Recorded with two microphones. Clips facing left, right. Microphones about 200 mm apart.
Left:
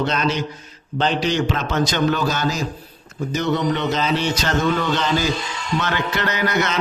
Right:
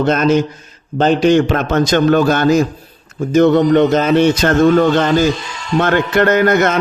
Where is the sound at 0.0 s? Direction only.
50° right (ahead or behind).